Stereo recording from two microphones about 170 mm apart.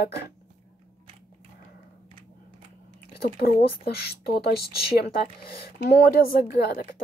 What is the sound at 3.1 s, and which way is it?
Speech, 65° left (ahead or behind).